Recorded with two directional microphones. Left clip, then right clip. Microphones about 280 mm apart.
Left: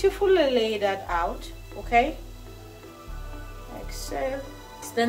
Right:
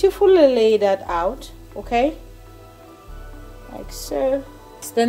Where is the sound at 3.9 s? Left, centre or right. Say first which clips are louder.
Right 8 dB; right.